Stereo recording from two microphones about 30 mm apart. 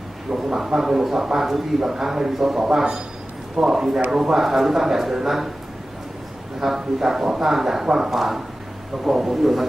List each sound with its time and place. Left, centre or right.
0.3 s speech: centre
6.6 s a man's voice: centre